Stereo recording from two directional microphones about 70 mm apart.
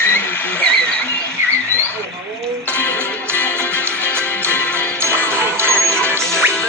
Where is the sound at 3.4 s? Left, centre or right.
Right.